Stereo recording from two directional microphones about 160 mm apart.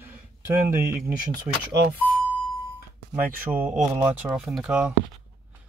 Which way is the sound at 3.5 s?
10° right (ahead or behind).